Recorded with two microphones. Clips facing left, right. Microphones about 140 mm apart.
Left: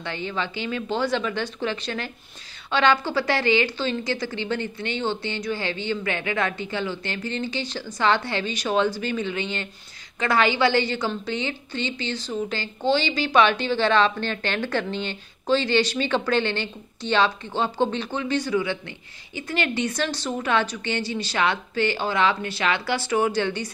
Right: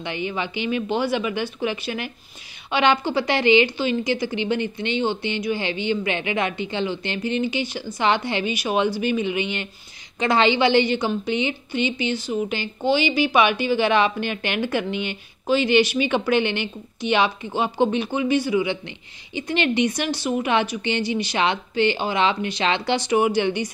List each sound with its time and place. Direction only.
0.0 s a woman's voice: 15° right (ahead or behind)